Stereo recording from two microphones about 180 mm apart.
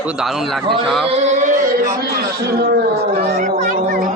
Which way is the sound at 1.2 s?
40° right (ahead or behind).